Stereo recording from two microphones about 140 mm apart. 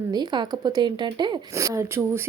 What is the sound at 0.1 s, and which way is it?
A woman's voice, 30° right (ahead or behind).